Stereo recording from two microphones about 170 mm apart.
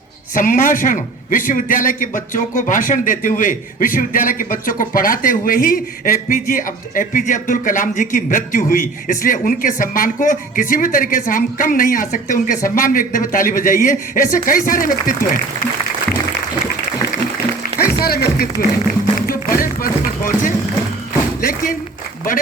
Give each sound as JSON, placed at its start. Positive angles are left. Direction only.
{"t": 0.3, "sound": "a man's voice", "side_deg": 55}
{"t": 18.0, "sound": "speech", "side_deg": 65}
{"t": 18.9, "sound": "music", "side_deg": 55}